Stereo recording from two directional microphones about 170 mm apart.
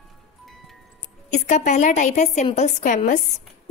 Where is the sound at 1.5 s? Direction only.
45° left (ahead or behind).